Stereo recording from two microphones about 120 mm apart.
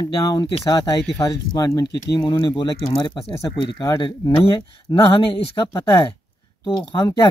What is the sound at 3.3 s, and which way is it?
Speech, 25° left (ahead or behind).